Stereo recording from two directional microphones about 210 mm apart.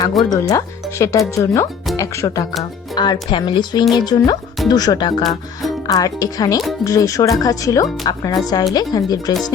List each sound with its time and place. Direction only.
0.3 s speech: 15° left (ahead or behind)